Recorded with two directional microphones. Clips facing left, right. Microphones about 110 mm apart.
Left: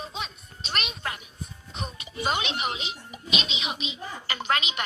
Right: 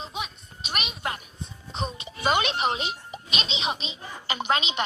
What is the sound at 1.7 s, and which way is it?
Music, 25° right (ahead or behind).